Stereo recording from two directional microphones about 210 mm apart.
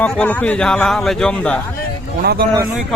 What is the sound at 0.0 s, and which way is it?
Speech, 5° left (ahead or behind).